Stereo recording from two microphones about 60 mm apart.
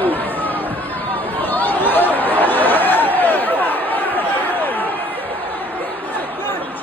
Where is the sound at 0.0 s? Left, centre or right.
Left.